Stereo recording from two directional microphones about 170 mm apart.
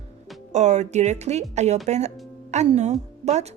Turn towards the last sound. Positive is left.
turn(degrees=-40)  # may be behind; listen again after turning